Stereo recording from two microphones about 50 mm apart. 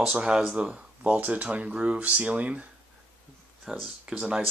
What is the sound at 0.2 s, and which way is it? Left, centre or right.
Speech, centre.